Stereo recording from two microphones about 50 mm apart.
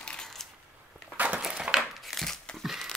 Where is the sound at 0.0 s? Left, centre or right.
Centre.